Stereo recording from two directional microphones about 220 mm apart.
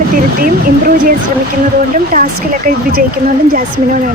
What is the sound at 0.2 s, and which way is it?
Speech, 40° right (ahead or behind).